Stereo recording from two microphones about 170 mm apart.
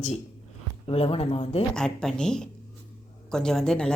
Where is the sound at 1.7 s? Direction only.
5° left (ahead or behind).